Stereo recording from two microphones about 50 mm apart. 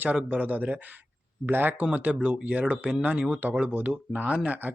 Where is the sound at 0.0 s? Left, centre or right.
Right.